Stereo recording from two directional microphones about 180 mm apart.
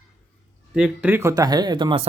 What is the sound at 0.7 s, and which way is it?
Speech, 5° right (ahead or behind).